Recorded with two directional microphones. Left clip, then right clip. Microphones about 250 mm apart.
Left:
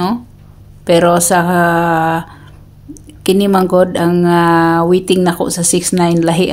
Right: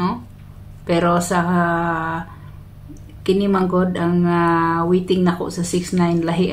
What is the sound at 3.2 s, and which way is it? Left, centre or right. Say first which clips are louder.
Speech: left 7 dB; left.